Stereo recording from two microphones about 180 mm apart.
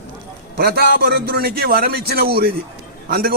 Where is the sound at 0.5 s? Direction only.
60° right (ahead or behind).